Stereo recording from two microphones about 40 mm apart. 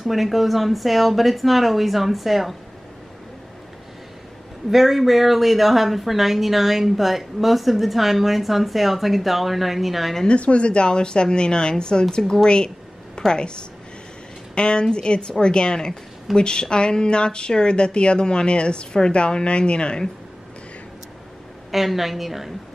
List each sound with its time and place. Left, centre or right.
0.0 s speech: centre
4.6 s speech: centre
10.2 s speech: left
12.4 s a sound: left
14.5 s speech: left
21.7 s speech: centre